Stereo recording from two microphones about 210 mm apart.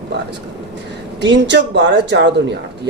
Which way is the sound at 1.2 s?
55° right (ahead or behind).